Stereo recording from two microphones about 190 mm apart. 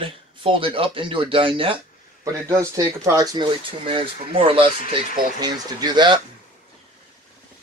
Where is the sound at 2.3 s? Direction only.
15° right (ahead or behind).